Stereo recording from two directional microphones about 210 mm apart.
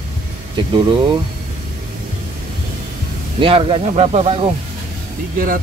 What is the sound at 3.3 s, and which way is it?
Speech, 25° right (ahead or behind).